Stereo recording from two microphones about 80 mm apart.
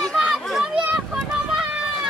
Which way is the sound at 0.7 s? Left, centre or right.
Centre.